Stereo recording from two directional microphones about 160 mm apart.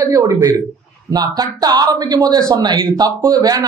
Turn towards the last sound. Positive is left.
turn(degrees=-25)  # may be behind; listen again after turning